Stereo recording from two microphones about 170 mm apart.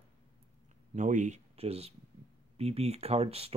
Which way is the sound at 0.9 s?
45° right (ahead or behind).